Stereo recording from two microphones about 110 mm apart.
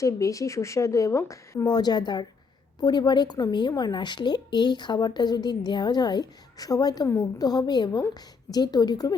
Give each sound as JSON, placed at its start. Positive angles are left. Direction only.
{"t": 0.0, "sound": "speech", "side_deg": 30}